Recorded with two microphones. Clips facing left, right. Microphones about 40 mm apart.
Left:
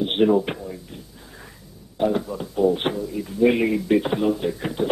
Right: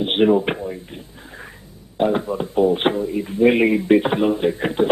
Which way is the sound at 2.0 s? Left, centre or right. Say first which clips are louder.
Right 3 dB; right.